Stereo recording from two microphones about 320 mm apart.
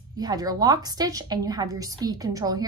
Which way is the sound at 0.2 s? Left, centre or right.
Centre.